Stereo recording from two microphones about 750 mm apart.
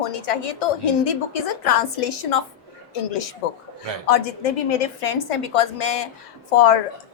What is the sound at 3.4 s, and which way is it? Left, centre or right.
Speech, left.